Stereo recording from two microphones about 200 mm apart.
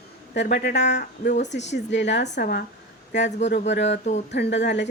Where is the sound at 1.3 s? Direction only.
35° left (ahead or behind).